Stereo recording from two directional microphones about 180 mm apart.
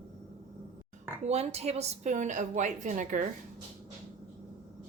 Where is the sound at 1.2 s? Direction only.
35° right (ahead or behind).